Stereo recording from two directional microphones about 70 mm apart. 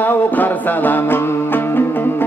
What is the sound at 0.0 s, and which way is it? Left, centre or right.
Music, left.